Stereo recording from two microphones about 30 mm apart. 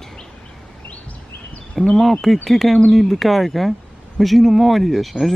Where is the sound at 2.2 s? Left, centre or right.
Centre.